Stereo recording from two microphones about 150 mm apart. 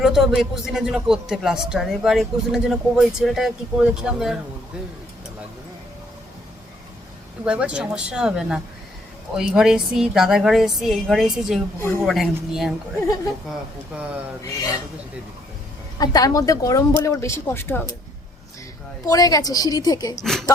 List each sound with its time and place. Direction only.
0.0 s speech: 5° right (ahead or behind)
7.4 s speech: 5° right (ahead or behind)
13.9 s speech: 10° right (ahead or behind)
16.0 s speech: 25° left (ahead or behind)
19.0 s speech: 25° left (ahead or behind)